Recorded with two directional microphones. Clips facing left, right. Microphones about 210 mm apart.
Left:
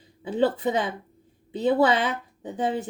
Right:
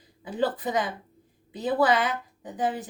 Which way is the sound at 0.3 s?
25° left (ahead or behind).